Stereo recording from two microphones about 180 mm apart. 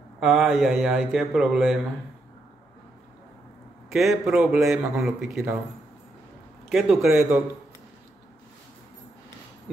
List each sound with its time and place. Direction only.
0.2 s speech: centre (ahead or behind)
3.9 s speech: centre (ahead or behind)
6.7 s speech: centre (ahead or behind)